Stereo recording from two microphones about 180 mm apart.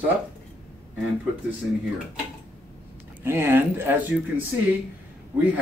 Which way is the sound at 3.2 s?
10° right (ahead or behind).